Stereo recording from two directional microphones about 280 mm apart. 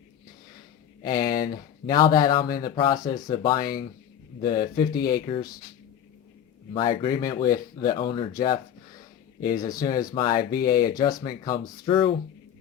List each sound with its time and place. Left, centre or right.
1.4 s speech: left
2.0 s speech: centre
3.6 s speech: left
4.4 s speech: centre
4.9 s speech: left
6.7 s speech: centre
9.6 s speech: centre
10.3 s speech: left
10.9 s speech: centre